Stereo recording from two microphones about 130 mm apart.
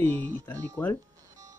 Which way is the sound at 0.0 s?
15° left (ahead or behind).